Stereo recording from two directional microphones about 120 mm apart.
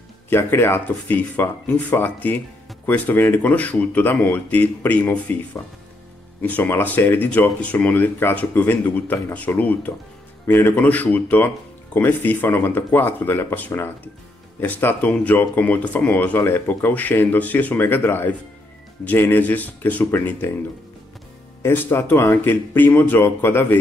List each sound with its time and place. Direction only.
0.3 s speech: 20° left (ahead or behind)
21.6 s speech: 20° left (ahead or behind)